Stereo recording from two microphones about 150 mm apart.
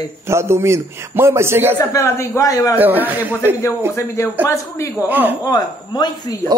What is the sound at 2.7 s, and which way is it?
Speech, 10° right (ahead or behind).